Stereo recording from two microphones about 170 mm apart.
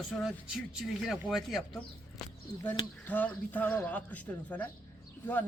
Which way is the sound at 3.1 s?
10° left (ahead or behind).